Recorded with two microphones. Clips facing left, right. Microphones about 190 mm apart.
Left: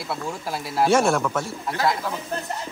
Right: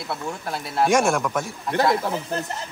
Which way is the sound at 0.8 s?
10° right (ahead or behind).